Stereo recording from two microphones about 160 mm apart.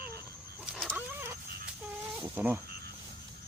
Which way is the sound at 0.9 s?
15° right (ahead or behind).